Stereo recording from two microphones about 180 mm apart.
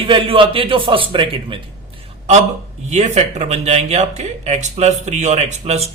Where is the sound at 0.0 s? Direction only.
30° right (ahead or behind).